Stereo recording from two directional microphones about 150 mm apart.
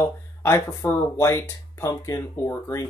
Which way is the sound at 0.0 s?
20° left (ahead or behind).